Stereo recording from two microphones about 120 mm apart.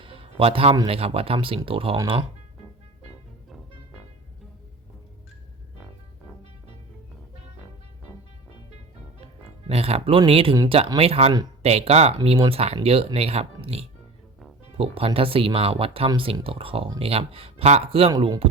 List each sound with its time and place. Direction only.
0.0 s music: 50° right (ahead or behind)
0.9 s speech: 55° right (ahead or behind)
9.6 s music: 55° right (ahead or behind)
10.2 s speech: 50° right (ahead or behind)